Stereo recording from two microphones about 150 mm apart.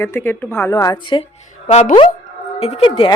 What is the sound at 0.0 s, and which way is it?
Speech, 15° left (ahead or behind).